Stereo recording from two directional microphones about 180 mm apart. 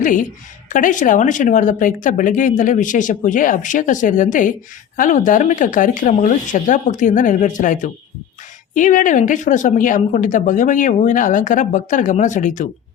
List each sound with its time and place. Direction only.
0.0 s speech: 45° left (ahead or behind)